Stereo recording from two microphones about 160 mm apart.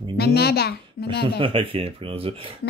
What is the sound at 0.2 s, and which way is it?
Speech, 85° left.